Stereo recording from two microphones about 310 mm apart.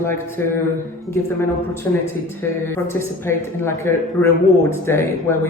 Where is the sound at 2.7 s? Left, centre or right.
Centre.